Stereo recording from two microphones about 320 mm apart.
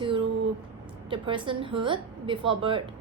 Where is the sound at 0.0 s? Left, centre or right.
Centre.